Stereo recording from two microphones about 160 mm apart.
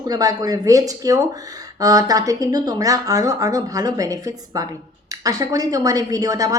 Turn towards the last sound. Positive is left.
turn(degrees=-20)  # may be behind; listen again after turning